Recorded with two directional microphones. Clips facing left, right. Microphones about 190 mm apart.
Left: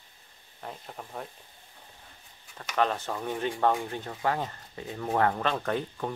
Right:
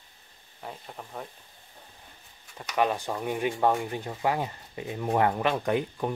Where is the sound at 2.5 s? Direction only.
10° right (ahead or behind).